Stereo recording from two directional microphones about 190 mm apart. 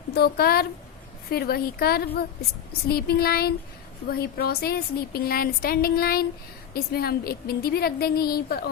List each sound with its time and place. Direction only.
0.1 s speech: 55° left (ahead or behind)
2.8 s child singing: 55° left (ahead or behind)
4.1 s speech: 55° left (ahead or behind)